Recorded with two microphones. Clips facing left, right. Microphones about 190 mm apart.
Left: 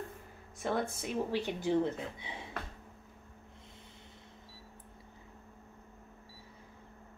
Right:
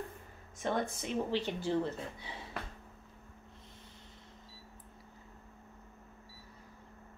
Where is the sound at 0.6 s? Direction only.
5° left (ahead or behind).